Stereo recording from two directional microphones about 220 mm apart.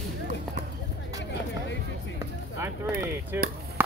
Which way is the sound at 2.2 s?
10° right (ahead or behind).